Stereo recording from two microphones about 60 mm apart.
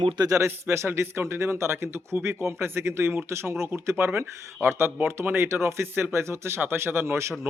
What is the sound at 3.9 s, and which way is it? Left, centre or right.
Speech, right.